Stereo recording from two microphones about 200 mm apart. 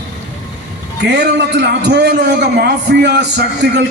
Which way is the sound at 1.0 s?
60° right (ahead or behind).